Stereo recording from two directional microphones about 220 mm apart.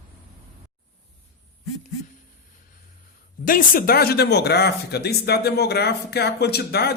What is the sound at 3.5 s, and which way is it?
A man's voice, 40° left (ahead or behind).